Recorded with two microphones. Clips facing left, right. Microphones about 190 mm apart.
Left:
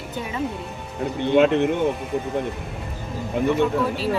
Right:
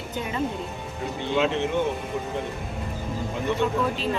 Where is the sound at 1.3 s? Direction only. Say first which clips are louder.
Left 7 dB; 55° left (ahead or behind).